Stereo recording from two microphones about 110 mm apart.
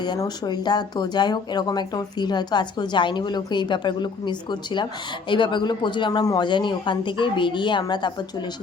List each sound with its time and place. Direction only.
0.4 s speech: 40° left (ahead or behind)